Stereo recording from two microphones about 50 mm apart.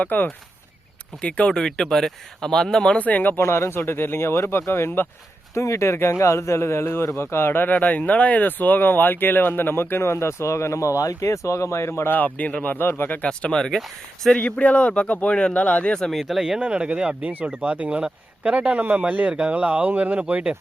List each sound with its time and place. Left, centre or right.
0.0 s speech: left
1.2 s speech: centre
3.0 s speech: left
3.3 s a man's voice: left
3.8 s speech: left
5.5 s a man's voice: left
12.1 s speech: left
12.6 s speech: left
13.2 s speech: centre
13.7 s speech: centre
14.3 s speech: left
16.1 s speech: centre
16.6 s speech: right